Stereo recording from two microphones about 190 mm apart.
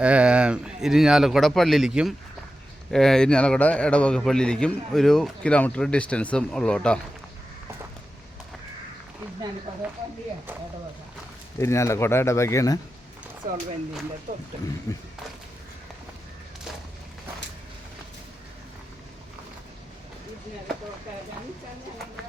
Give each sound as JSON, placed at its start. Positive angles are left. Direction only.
{"t": 0.0, "sound": "a man's voice", "side_deg": -5}
{"t": 11.6, "sound": "speech", "side_deg": 15}
{"t": 13.4, "sound": "speech", "side_deg": -45}
{"t": 14.9, "sound": "speech", "side_deg": 20}